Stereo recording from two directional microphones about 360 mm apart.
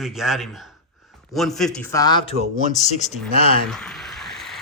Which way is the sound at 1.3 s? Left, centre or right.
Centre.